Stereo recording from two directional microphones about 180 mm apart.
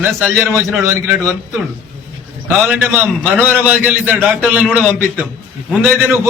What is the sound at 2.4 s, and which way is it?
A man's voice, 10° right (ahead or behind).